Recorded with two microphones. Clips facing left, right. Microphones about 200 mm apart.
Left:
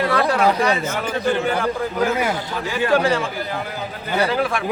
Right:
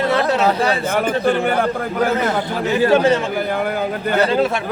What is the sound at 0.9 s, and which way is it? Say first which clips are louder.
A man's voice: right 4 dB; 55° right (ahead or behind).